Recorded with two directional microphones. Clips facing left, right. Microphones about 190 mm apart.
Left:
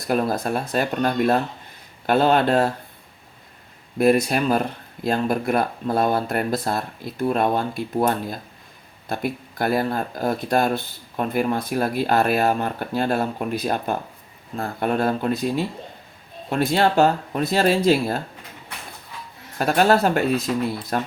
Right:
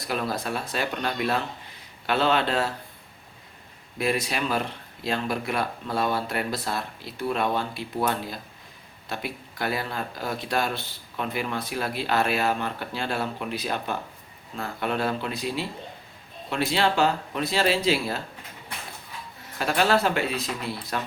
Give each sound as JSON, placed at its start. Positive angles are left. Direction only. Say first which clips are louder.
{"t": 0.1, "sound": "speech", "louder": "left 7 dB", "side_deg": 50}
{"t": 3.9, "sound": "speech", "louder": "left 9 dB", "side_deg": 50}
{"t": 19.5, "sound": "speech", "louder": "left 5 dB", "side_deg": 45}